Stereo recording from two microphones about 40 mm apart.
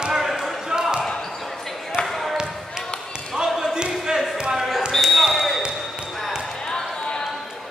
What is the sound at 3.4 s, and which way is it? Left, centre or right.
Basketball bounce, right.